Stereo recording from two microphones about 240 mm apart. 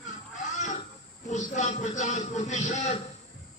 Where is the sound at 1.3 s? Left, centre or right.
Left.